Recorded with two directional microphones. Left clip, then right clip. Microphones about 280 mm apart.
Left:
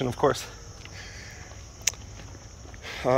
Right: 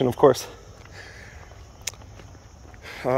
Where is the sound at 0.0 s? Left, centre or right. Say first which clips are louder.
Right 7 dB; right.